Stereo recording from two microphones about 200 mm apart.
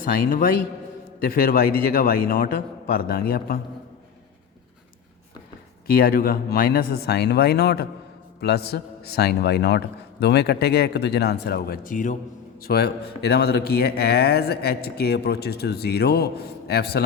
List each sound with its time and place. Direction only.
0.0 s speech: 45° left (ahead or behind)
5.9 s speech: 45° left (ahead or behind)